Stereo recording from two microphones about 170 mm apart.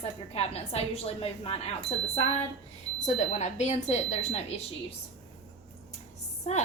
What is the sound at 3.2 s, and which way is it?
A woman's voice, 40° left (ahead or behind).